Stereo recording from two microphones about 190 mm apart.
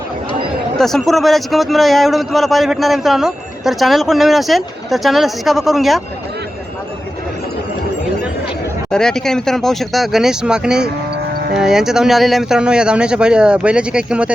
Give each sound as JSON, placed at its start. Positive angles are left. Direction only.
{"t": 0.8, "sound": "a man's voice", "side_deg": 0}
{"t": 8.9, "sound": "a man's voice", "side_deg": 5}
{"t": 11.3, "sound": "cattle", "side_deg": -50}
{"t": 11.6, "sound": "a man's voice", "side_deg": 0}